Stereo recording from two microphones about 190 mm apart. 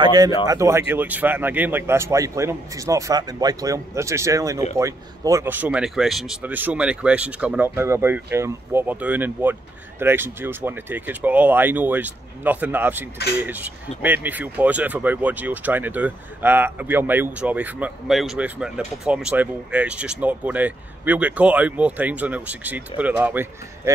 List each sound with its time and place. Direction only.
0.0 s speech: 20° right (ahead or behind)